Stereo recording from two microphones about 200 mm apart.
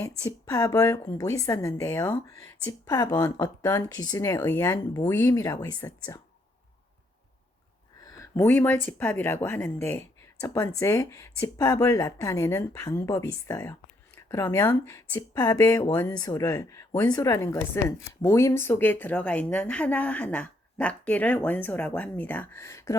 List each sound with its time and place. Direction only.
0.2 s speech: 15° left (ahead or behind)
8.2 s speech: 15° left (ahead or behind)